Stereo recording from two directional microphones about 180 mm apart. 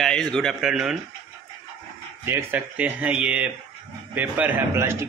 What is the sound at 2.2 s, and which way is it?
Speech, 10° right (ahead or behind).